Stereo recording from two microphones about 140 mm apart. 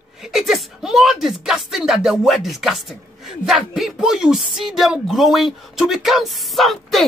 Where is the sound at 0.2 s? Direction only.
Centre (ahead or behind).